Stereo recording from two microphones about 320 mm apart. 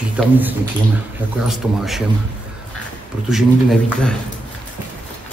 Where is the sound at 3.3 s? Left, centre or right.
Centre.